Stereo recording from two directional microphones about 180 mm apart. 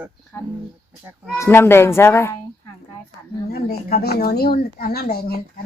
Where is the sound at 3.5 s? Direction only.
60° left (ahead or behind).